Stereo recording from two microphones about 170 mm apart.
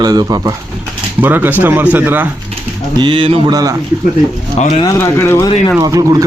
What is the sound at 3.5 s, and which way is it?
Mantra, 20° right (ahead or behind).